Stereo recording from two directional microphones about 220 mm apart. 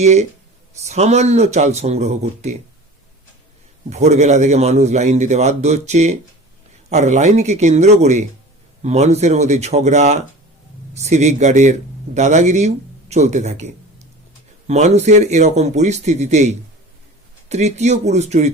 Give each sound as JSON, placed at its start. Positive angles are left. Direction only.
{"t": 0.0, "sound": "speech", "side_deg": -30}
{"t": 3.8, "sound": "speech", "side_deg": -30}